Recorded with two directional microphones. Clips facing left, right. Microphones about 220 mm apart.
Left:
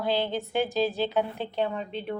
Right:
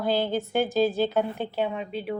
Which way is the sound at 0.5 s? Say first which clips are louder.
Right 3 dB; 45° right (ahead or behind).